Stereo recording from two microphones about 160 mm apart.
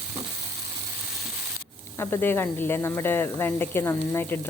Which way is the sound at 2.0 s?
15° left (ahead or behind).